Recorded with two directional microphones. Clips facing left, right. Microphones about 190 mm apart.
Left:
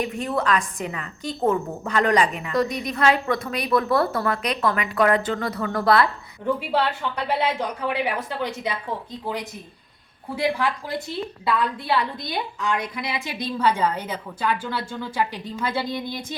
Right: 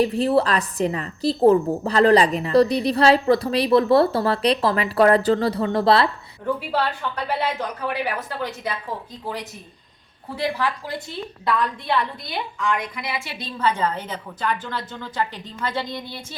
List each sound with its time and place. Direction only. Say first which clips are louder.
0.0 s a woman's voice: right 6 dB; 35° right (ahead or behind)
6.4 s a woman's voice: left 1 dB; 15° left (ahead or behind)
10.3 s a woman's voice: left 1 dB; 15° left (ahead or behind)
12.3 s a woman's voice: right 1 dB; 20° left (ahead or behind)